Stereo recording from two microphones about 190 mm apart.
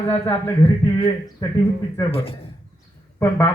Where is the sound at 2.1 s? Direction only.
30° left (ahead or behind).